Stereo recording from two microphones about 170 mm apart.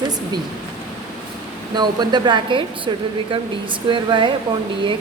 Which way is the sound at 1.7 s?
25° right (ahead or behind).